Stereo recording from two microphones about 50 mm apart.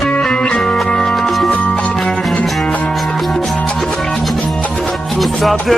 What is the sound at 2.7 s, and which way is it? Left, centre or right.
Music, left.